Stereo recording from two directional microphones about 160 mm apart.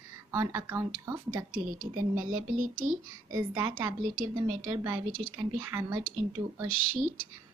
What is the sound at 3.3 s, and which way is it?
Speech, 20° right (ahead or behind).